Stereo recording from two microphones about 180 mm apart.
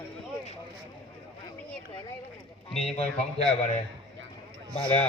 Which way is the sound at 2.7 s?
Centre (ahead or behind).